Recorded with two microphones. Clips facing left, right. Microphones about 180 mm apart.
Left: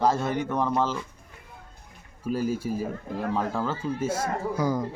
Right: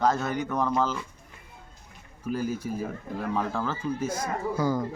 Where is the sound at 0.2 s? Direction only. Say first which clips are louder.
Left 2 dB; 30° left (ahead or behind).